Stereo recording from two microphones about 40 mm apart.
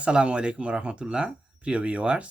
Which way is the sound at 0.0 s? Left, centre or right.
Right.